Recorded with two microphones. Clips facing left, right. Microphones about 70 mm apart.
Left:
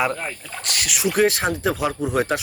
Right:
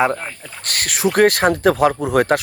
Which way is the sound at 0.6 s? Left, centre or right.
Right.